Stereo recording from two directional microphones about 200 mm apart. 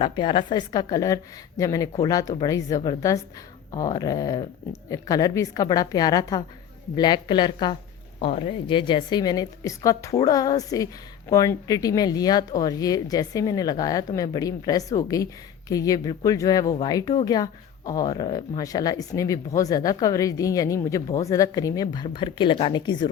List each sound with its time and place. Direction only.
0.0 s a woman's voice: 25° left (ahead or behind)